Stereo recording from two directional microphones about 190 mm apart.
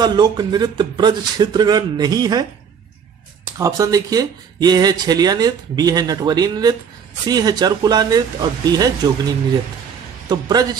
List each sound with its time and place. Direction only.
0.0 s speech: 20° right (ahead or behind)
3.5 s speech: 15° right (ahead or behind)
10.2 s speech: 20° right (ahead or behind)